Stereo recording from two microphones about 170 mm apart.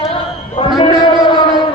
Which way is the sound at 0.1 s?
35° left (ahead or behind).